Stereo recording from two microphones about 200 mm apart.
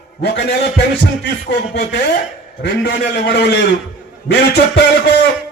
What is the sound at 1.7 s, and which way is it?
A man's voice, 60° left (ahead or behind).